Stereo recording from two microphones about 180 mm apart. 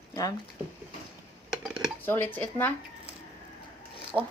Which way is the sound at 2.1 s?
10° left (ahead or behind).